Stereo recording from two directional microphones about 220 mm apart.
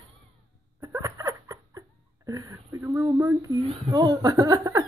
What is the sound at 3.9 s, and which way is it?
Speech, 20° right (ahead or behind).